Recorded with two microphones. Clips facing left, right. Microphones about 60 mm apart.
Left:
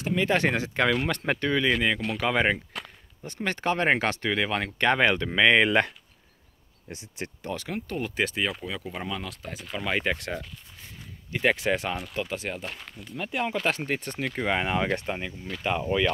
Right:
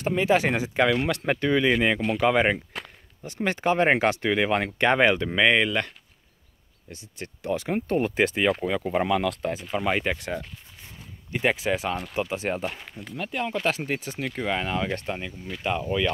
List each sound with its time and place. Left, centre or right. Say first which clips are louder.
0.1 s speech: right 1 dB; centre
6.9 s speech: left 3 dB; left
7.5 s speech: right 8 dB; right
7.9 s speech: right 6 dB; right
9.0 s speech: right 10 dB; right
9.6 s speech: right 4 dB; centre
11.3 s speech: even; centre
12.1 s speech: right 4 dB; right
12.7 s speech: right 2 dB; centre
13.1 s speech: even; centre
15.0 s speech: even; centre